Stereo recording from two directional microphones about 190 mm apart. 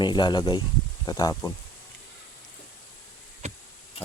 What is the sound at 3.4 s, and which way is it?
Insect, 35° right (ahead or behind).